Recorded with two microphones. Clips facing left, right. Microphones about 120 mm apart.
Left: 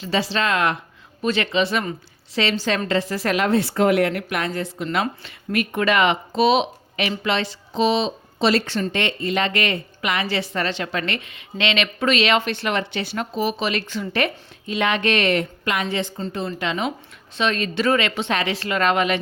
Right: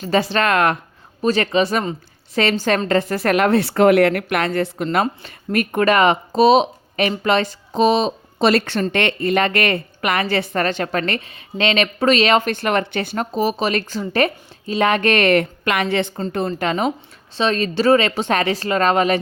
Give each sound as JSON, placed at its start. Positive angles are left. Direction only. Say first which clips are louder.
{"t": 0.0, "sound": "a woman's voice", "louder": "right 4 dB", "side_deg": -50}
{"t": 1.2, "sound": "a woman's voice", "louder": "right 4 dB", "side_deg": -40}
{"t": 16.5, "sound": "a woman's voice", "louder": "right 4 dB", "side_deg": -45}
{"t": 17.3, "sound": "speech", "louder": "right 3 dB", "side_deg": -35}